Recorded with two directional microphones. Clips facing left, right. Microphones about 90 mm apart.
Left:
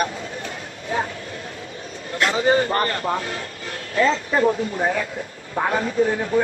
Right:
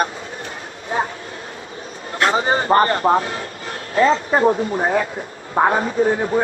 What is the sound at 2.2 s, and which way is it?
Speech, 35° right (ahead or behind).